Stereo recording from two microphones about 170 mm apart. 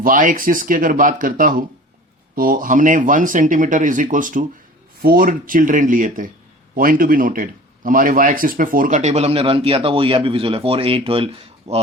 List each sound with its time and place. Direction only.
0.0 s speech: 50° right (ahead or behind)